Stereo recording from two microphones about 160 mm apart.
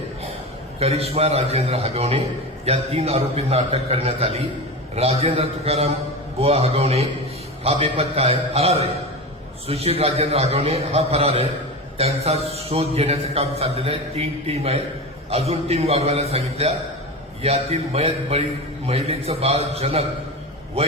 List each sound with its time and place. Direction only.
0.8 s a man's voice: 40° right (ahead or behind)